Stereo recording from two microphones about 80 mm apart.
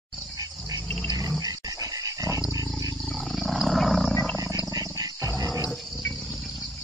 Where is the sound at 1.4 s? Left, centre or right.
Right.